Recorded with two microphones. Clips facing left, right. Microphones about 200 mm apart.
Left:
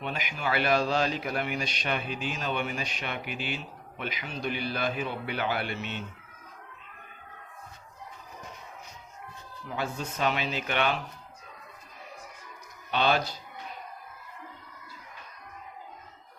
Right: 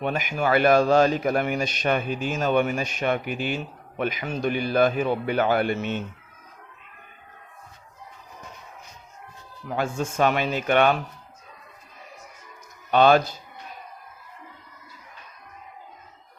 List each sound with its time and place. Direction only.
0.0 s a man's voice: 50° right (ahead or behind)
9.6 s a man's voice: 50° right (ahead or behind)
12.9 s a man's voice: 50° right (ahead or behind)